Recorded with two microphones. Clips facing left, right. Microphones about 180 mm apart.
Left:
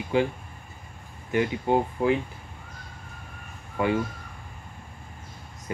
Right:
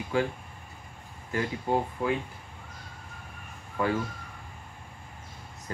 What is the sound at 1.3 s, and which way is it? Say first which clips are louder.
Speech: left 5 dB; 20° left (ahead or behind).